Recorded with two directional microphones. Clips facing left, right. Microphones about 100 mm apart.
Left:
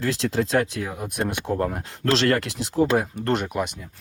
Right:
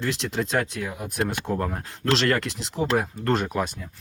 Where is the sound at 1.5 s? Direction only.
30° left (ahead or behind).